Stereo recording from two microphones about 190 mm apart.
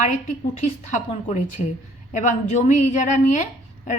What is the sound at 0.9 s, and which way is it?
A woman's voice, 40° left (ahead or behind).